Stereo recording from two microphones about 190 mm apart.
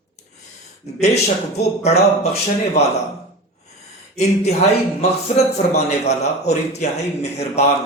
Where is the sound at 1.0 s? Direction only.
35° left (ahead or behind).